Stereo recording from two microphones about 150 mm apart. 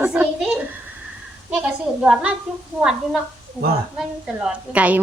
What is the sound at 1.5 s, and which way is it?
Speech, 10° right (ahead or behind).